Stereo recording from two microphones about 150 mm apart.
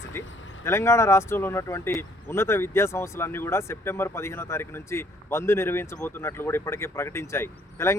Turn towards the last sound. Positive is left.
turn(degrees=15)  # may be behind; listen again after turning